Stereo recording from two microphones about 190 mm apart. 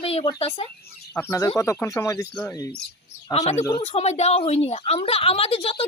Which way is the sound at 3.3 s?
35° left (ahead or behind).